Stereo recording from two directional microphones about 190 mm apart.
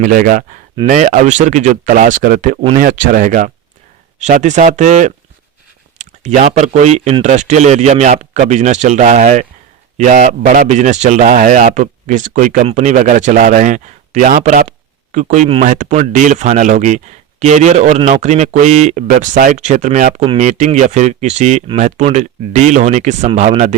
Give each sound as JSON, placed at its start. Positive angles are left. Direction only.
{"t": 0.0, "sound": "a man's voice", "side_deg": -45}